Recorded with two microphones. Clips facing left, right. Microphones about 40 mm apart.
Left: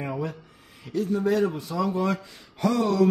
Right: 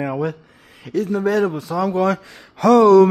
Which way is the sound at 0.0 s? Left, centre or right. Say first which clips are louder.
Right 8 dB; right.